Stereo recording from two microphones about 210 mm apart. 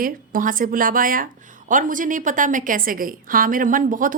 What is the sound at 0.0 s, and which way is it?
Speech, 40° right (ahead or behind).